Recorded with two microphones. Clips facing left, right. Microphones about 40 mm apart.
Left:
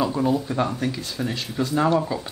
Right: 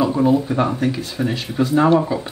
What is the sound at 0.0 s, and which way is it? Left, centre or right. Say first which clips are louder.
Speech: right 6 dB; centre.